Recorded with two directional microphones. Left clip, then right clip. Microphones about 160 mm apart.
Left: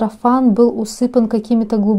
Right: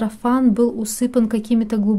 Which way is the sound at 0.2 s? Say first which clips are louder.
Left 5 dB; 5° left (ahead or behind).